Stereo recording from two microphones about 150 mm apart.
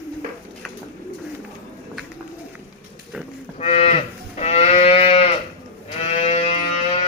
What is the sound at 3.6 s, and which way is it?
Livestock, 45° left (ahead or behind).